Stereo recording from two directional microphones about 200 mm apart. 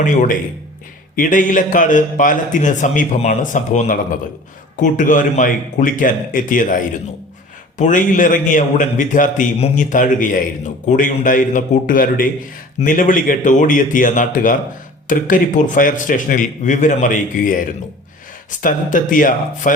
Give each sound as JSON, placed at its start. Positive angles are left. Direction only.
{"t": 0.0, "sound": "a man's voice", "side_deg": 40}